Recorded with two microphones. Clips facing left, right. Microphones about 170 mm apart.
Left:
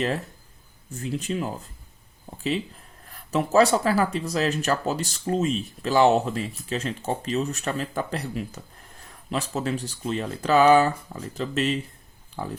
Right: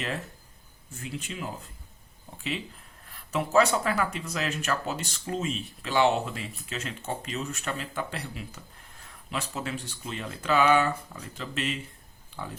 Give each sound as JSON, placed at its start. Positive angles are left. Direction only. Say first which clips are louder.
{"t": 0.9, "sound": "speech", "louder": "left 8 dB", "side_deg": 40}
{"t": 3.3, "sound": "speech", "louder": "left 4 dB", "side_deg": 35}